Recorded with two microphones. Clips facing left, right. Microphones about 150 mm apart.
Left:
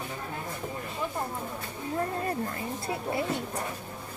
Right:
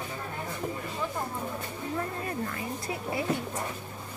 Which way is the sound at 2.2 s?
35° left (ahead or behind).